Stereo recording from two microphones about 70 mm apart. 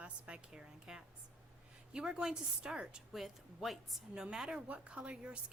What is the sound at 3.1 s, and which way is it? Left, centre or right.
A woman's voice, centre.